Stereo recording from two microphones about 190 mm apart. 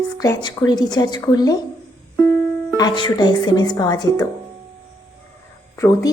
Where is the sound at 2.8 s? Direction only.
25° left (ahead or behind).